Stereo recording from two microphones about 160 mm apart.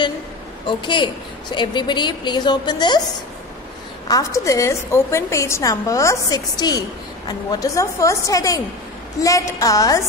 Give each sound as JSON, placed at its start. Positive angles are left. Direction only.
{"t": 0.7, "sound": "a woman's voice", "side_deg": 30}
{"t": 4.1, "sound": "a woman's voice", "side_deg": 20}